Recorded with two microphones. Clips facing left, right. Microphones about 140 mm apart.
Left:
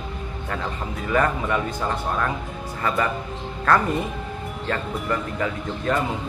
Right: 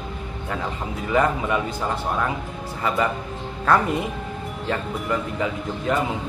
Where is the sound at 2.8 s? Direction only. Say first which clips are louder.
Right 1 dB; 15° right (ahead or behind).